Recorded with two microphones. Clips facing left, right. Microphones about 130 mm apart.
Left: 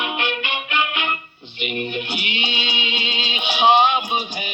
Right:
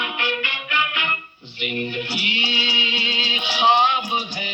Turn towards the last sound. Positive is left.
turn(degrees=20)  # may be behind; listen again after turning